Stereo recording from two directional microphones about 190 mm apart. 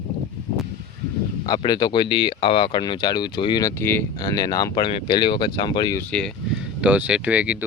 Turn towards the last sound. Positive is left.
turn(degrees=-5)  # may be behind; listen again after turning